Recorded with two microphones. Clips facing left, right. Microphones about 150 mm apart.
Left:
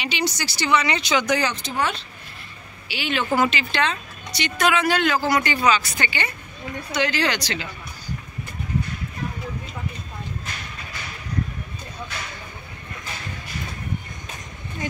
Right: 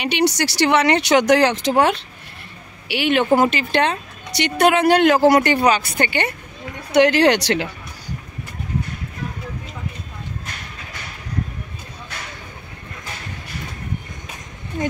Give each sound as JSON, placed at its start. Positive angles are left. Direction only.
{"t": 0.0, "sound": "speech", "side_deg": -70}
{"t": 2.9, "sound": "a woman's voice", "side_deg": -60}
{"t": 3.3, "sound": "a woman's voice", "side_deg": -50}